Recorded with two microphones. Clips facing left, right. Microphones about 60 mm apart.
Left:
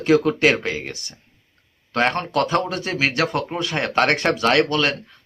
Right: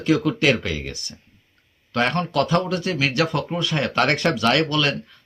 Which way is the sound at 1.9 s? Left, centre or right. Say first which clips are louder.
Left 2 dB; left.